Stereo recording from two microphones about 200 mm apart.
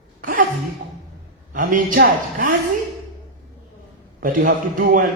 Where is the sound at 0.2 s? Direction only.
45° right (ahead or behind).